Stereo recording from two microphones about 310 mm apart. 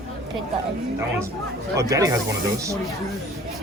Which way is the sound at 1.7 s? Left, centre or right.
Centre.